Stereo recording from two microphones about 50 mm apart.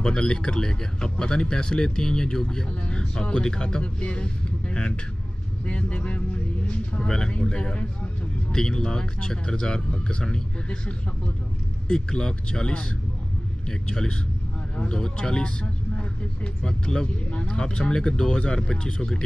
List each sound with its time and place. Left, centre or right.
0.0 s speech: centre
16.6 s speech: centre